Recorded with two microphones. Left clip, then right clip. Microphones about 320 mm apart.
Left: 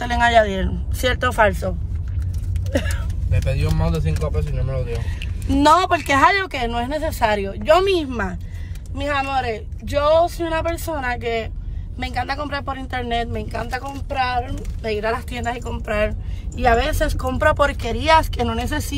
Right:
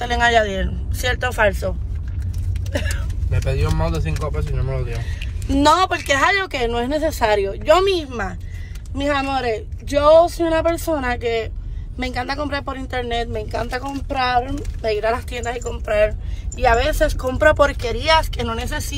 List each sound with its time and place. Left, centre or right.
0.0 s speech: centre
2.7 s speech: centre
3.3 s speech: centre
5.5 s speech: centre